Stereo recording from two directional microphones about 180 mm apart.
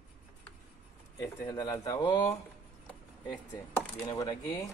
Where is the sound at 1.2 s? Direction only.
20° left (ahead or behind).